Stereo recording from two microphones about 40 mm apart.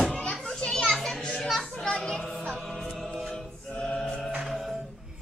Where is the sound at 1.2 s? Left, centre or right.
Left.